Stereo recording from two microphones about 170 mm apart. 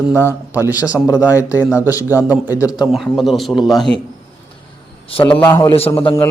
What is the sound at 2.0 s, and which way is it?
Speech, 15° right (ahead or behind).